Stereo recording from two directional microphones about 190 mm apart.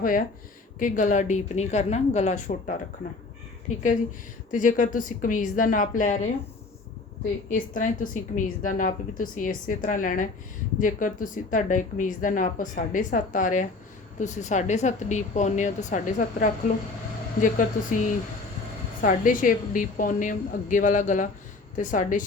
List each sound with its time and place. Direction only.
0.0 s speech: 45° left (ahead or behind)
4.5 s a woman's voice: 45° left (ahead or behind)
7.5 s a woman's voice: 45° left (ahead or behind)
19.0 s a woman's voice: 45° left (ahead or behind)